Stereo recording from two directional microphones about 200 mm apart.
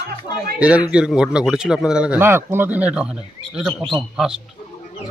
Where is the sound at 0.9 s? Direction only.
5° right (ahead or behind).